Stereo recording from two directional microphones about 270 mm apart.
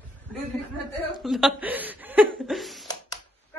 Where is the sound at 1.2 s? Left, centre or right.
Centre.